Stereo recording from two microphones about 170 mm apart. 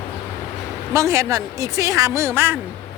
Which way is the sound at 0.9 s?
15° right (ahead or behind).